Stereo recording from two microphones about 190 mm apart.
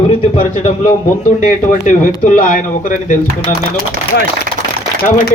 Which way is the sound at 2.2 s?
45° left (ahead or behind).